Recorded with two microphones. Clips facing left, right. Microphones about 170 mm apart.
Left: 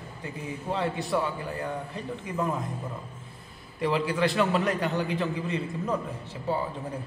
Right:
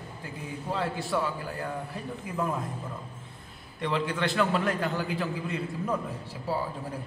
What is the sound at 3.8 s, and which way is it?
A man's voice, centre (ahead or behind).